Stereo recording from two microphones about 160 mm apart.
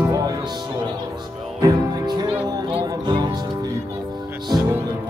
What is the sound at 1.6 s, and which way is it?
Music, 25° right (ahead or behind).